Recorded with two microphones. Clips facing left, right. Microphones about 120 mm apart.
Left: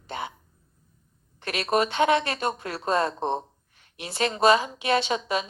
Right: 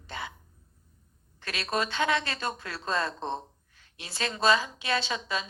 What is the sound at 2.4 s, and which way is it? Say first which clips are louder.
Speech: left 6 dB; 35° left (ahead or behind).